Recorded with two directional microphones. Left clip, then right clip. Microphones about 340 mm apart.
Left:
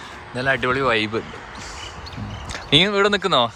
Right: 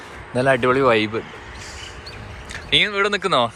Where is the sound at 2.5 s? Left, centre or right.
Centre.